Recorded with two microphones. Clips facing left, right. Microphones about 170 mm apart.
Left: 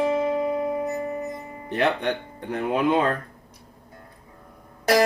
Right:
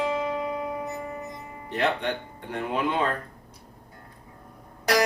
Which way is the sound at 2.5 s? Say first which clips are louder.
Left 5 dB; 45° left (ahead or behind).